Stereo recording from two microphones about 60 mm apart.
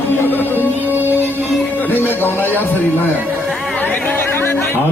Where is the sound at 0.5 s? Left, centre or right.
Right.